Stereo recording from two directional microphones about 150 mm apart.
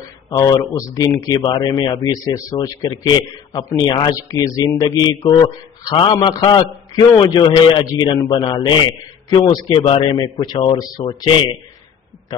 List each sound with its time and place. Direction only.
0.3 s speech: 25° left (ahead or behind)